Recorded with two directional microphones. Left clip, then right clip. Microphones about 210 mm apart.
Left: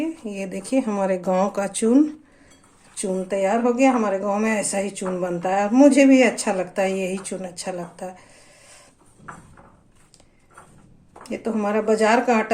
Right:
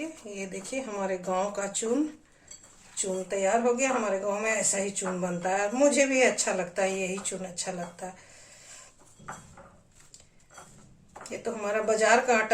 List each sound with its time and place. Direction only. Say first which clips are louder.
0.0 s speech: left 9 dB; 50° left (ahead or behind)
11.3 s speech: left 7 dB; 40° left (ahead or behind)